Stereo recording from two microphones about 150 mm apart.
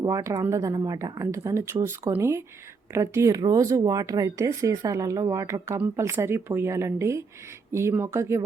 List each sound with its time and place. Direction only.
0.0 s speech: 20° right (ahead or behind)